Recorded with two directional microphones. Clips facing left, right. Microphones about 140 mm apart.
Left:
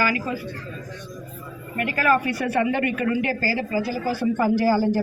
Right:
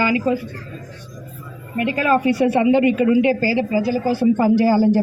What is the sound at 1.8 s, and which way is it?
Speech, 25° right (ahead or behind).